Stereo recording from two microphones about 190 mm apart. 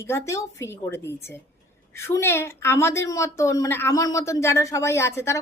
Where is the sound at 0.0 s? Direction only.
15° left (ahead or behind).